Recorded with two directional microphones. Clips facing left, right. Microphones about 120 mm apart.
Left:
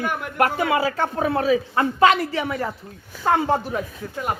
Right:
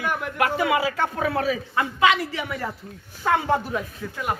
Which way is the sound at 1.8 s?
40° left (ahead or behind).